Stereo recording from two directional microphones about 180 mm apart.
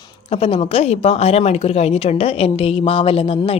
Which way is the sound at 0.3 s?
30° left (ahead or behind).